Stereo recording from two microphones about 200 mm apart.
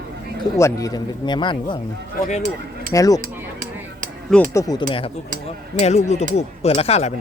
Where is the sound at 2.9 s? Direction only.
15° left (ahead or behind).